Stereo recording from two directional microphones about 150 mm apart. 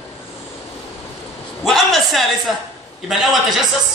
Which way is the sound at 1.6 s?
Centre (ahead or behind).